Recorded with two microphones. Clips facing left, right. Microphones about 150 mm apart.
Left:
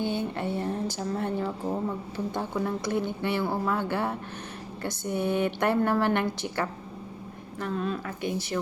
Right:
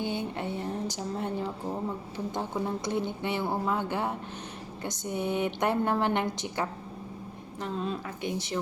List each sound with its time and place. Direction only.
0.0 s a woman's voice: 15° right (ahead or behind)